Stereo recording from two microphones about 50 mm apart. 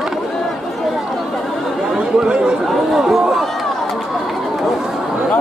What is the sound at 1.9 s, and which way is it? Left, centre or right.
Chatter, right.